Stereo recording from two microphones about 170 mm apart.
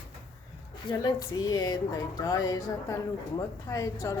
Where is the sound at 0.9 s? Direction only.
20° left (ahead or behind).